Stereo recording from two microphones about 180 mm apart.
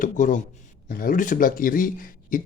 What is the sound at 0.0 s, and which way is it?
A man's voice, 45° left (ahead or behind).